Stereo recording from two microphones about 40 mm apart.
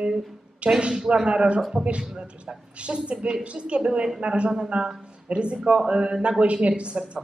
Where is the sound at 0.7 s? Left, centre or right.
Right.